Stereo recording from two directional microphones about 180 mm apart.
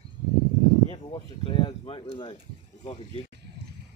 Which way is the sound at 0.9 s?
30° left (ahead or behind).